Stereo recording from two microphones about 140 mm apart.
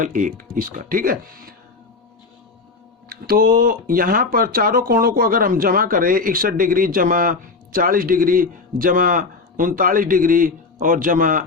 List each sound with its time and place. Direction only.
0.0 s speech: 70° right (ahead or behind); by 1.5 s 90° right
3.1 s speech: 90° right; by 11.4 s 75° right (ahead or behind)